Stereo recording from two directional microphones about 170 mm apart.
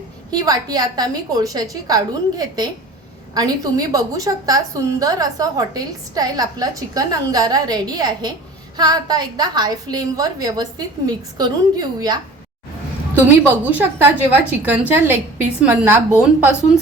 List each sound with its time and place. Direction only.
0.3 s a woman's voice: 20° right (ahead or behind)
13.4 s a woman's voice: 10° right (ahead or behind)